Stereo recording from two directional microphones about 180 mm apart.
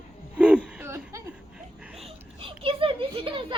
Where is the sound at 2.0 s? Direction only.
30° right (ahead or behind).